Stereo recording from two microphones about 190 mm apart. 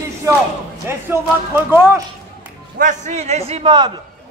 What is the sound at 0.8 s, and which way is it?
Speech, 10° right (ahead or behind).